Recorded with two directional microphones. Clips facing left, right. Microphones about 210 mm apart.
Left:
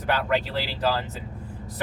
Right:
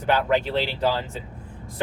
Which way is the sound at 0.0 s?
25° right (ahead or behind).